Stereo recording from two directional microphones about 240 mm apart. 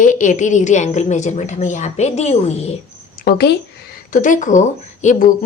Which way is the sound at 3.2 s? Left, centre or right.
Left.